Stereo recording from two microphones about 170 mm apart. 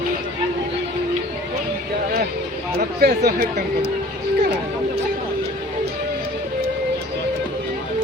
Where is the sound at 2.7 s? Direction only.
65° right (ahead or behind).